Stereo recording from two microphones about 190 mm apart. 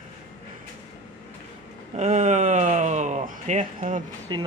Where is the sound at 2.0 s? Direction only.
40° right (ahead or behind).